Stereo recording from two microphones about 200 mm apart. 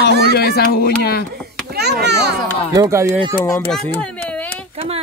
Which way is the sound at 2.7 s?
15° right (ahead or behind).